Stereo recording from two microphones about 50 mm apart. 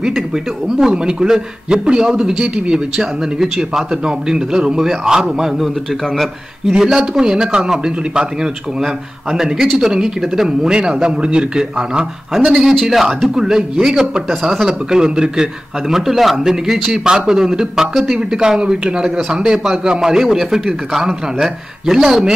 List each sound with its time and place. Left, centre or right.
0.7 s a man's voice: centre
6.8 s a man's voice: centre
12.4 s a man's voice: centre